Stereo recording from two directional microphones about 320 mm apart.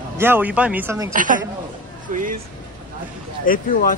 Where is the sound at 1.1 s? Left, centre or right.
Right.